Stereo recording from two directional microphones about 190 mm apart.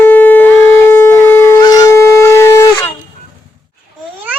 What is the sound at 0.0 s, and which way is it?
Shofar, 10° left (ahead or behind).